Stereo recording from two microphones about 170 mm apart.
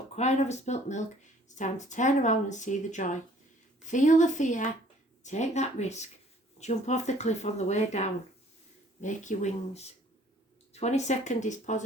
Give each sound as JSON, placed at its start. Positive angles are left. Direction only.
{"t": 0.2, "sound": "speech", "side_deg": 40}